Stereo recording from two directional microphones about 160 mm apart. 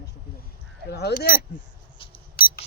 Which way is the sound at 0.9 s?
85° left.